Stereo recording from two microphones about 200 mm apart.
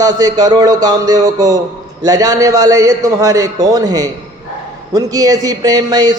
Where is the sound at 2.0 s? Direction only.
20° right (ahead or behind).